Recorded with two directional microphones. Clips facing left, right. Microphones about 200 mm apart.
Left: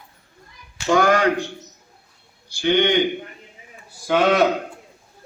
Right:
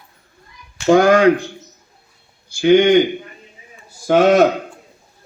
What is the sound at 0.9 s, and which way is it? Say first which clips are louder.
Speech: right 6 dB; 50° right (ahead or behind).